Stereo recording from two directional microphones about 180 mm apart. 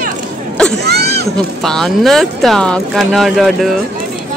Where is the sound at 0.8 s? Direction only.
65° right (ahead or behind).